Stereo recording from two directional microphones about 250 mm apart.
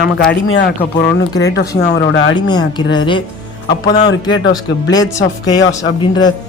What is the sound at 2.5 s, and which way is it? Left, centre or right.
Speech, centre.